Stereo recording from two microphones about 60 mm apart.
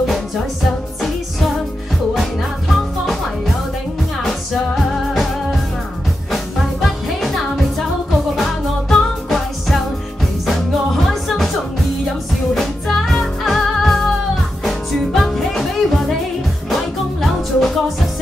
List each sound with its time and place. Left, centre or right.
4.2 s music: centre
8.4 s music: centre
11.1 s music: centre
12.5 s music: centre